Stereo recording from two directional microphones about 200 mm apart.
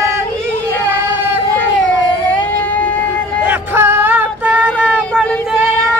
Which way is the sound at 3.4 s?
10° right (ahead or behind).